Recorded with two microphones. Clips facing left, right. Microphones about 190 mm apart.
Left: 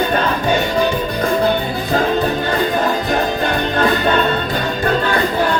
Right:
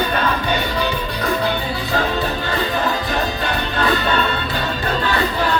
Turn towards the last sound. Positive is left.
turn(degrees=45)  # may be behind; listen again after turning